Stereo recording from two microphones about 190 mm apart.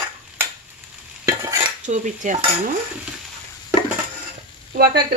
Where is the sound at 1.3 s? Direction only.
15° right (ahead or behind).